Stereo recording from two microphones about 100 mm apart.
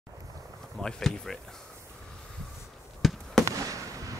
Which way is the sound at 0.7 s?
5° left (ahead or behind).